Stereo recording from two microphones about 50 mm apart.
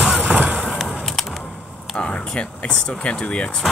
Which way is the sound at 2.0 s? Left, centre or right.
Left.